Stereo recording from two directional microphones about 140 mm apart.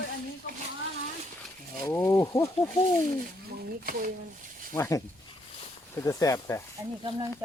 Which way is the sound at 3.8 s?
80° right.